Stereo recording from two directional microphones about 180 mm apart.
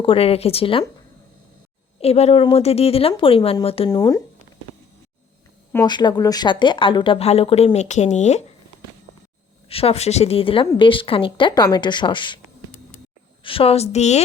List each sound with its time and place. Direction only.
0.0 s speech: 30° left (ahead or behind)
2.0 s speech: 35° left (ahead or behind)
3.8 s a woman's voice: 20° left (ahead or behind)
5.8 s a woman's voice: 25° left (ahead or behind); by 8.4 s 40° left (ahead or behind)
9.6 s a woman's voice: 35° left (ahead or behind)
13.4 s speech: 30° left (ahead or behind)